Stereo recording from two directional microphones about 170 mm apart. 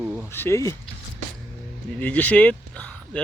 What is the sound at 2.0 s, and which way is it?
Speech, 10° left (ahead or behind).